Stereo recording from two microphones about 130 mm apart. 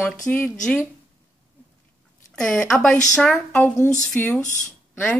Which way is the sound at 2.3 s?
5° left (ahead or behind).